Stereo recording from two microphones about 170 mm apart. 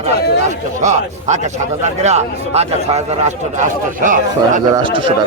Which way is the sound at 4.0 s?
50° right (ahead or behind).